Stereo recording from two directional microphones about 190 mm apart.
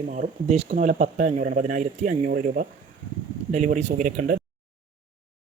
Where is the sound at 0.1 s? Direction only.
40° right (ahead or behind).